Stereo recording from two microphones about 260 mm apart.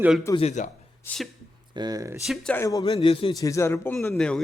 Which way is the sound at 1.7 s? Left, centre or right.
Centre.